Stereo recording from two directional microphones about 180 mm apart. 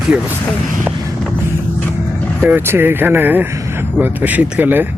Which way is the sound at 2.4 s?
10° right (ahead or behind).